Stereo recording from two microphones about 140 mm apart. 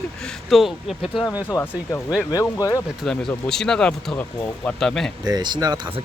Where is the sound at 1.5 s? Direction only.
25° left (ahead or behind).